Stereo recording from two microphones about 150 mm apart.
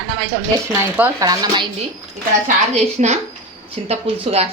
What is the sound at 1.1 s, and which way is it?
Speech, 25° right (ahead or behind).